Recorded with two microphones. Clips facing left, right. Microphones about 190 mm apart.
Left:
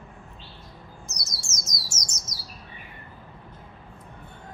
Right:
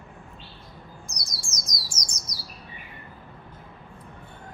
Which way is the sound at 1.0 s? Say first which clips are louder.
Even; 25° left (ahead or behind).